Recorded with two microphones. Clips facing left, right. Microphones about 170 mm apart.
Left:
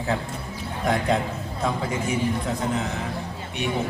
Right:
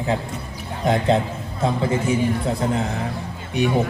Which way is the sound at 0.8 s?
25° right (ahead or behind).